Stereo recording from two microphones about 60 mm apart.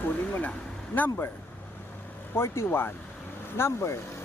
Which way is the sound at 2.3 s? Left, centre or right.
Left.